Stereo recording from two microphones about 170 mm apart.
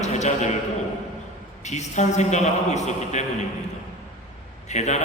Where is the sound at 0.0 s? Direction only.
45° left (ahead or behind).